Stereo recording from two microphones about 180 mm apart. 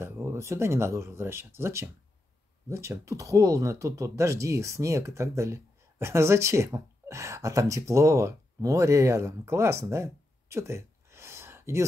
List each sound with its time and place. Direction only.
0.0 s speech: 15° right (ahead or behind)